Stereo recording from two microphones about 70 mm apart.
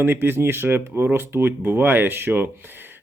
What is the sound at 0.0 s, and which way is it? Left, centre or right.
Speech, right.